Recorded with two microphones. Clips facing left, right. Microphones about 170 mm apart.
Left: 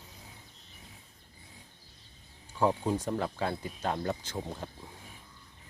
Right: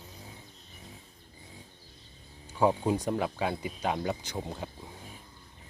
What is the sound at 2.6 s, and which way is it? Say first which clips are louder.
Speech: right 2 dB; 10° right (ahead or behind).